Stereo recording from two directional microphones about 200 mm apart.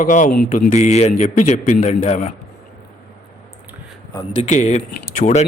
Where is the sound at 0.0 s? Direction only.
40° left (ahead or behind).